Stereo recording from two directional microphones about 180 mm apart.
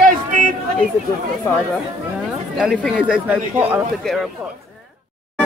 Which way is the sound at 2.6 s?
Centre (ahead or behind).